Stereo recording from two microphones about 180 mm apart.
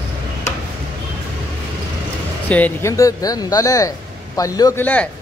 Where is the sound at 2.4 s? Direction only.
10° left (ahead or behind).